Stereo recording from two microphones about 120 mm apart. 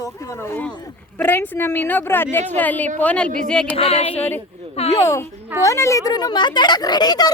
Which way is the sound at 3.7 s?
55° left (ahead or behind).